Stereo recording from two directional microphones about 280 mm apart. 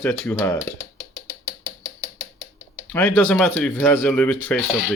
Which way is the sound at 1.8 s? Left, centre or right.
Left.